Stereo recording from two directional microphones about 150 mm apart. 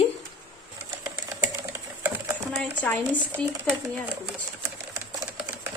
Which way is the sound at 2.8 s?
10° left (ahead or behind).